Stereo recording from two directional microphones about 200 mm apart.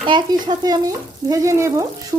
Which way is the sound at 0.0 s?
25° right (ahead or behind).